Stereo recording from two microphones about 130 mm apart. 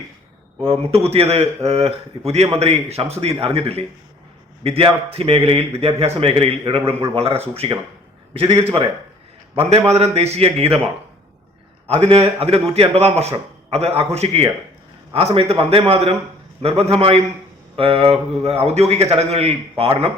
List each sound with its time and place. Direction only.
0.6 s a man's voice: 50° right (ahead or behind)
11.9 s a man's voice: 45° right (ahead or behind)